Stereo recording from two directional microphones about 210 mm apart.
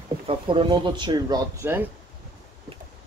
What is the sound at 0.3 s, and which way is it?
Speech, 25° right (ahead or behind).